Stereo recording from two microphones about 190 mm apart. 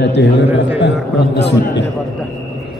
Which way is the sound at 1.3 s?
65° left (ahead or behind).